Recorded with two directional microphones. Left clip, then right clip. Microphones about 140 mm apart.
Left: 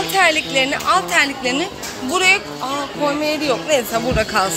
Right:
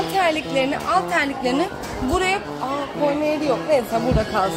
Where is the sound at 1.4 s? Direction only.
35° right (ahead or behind).